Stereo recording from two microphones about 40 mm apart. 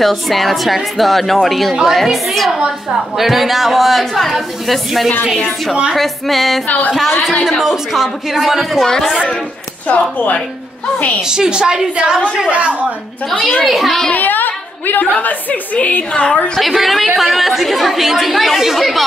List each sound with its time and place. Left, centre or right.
0.0 s speech: centre
6.9 s a woman's voice: centre
9.8 s a woman's voice: left
11.1 s a woman's voice: centre
12.4 s a woman's voice: right
13.7 s speech: centre
14.1 s a sound: left
15.1 s a woman's voice: left
16.1 s a woman's voice: left
16.5 s speech: centre